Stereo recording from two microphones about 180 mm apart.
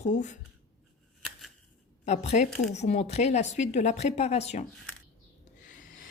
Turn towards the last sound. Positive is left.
turn(degrees=45)  # may be behind; listen again after turning